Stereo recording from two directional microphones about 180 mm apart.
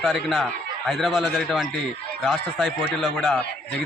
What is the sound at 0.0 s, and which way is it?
A man's voice, centre (ahead or behind).